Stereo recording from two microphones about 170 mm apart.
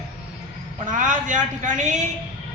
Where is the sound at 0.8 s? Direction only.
50° right (ahead or behind).